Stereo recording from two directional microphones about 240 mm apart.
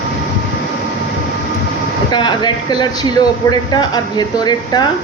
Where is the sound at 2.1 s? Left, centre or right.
Centre.